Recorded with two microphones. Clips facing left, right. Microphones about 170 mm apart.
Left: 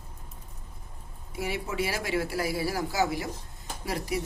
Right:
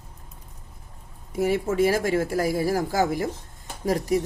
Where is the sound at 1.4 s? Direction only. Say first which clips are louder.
Right 9 dB; 45° right (ahead or behind).